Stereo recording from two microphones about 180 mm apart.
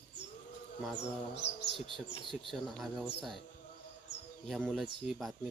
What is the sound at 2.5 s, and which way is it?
Speech, centre (ahead or behind).